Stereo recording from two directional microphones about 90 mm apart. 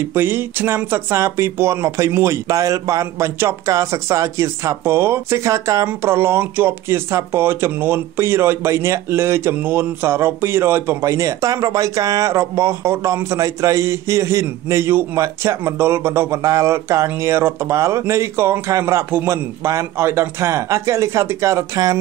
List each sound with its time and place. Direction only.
0.0 s speech: 25° right (ahead or behind)
5.9 s speech: 25° right (ahead or behind)